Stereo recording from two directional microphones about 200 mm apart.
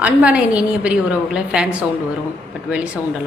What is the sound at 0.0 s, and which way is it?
A woman's voice, 5° right (ahead or behind).